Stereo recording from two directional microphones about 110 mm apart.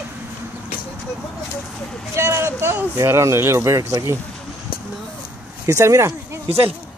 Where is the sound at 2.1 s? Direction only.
25° right (ahead or behind).